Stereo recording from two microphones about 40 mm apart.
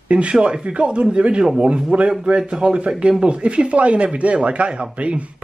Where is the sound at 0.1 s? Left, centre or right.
Right.